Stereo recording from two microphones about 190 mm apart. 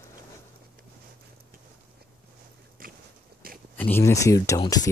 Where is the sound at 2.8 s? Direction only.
50° right (ahead or behind).